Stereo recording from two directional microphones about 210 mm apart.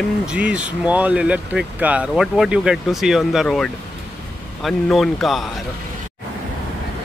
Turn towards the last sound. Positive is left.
turn(degrees=0)  # may be behind; listen again after turning